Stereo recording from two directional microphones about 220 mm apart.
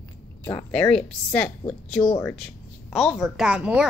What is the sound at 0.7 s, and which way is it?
A woman's voice, 5° left (ahead or behind).